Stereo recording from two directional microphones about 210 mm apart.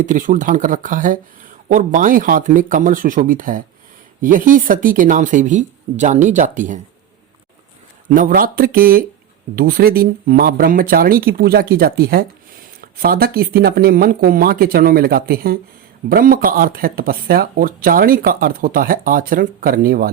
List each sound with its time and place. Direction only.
0.0 s speech: 40° right (ahead or behind)
8.1 s speech: 40° right (ahead or behind)